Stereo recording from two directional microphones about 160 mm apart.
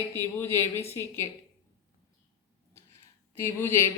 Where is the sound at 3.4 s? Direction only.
15° left (ahead or behind).